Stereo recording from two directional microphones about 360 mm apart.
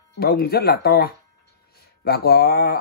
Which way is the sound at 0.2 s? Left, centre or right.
Left.